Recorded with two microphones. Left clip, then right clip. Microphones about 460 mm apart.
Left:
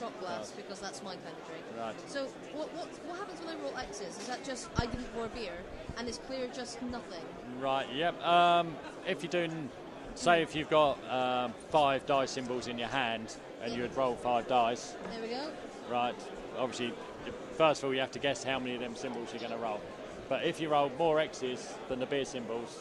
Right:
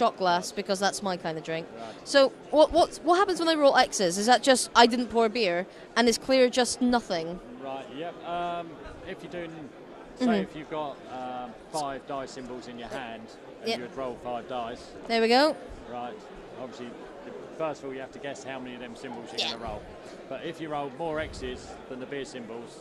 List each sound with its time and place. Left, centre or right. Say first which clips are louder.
0.0 s speech: right 15 dB; right
7.6 s speech: left 6 dB; left
13.9 s speech: left 3 dB; left
15.1 s speech: right 19 dB; right
17.6 s speech: left 5 dB; left
19.4 s speech: right 15 dB; right
20.3 s speech: left 4 dB; left